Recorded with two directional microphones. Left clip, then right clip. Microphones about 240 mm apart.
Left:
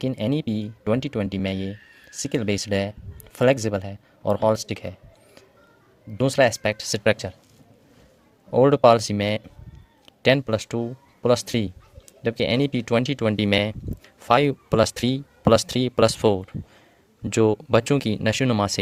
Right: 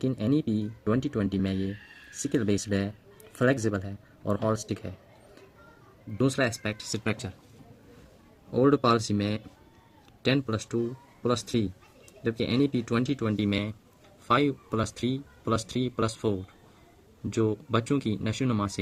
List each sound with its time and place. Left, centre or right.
0.0 s speech: left
6.1 s speech: left
8.5 s speech: left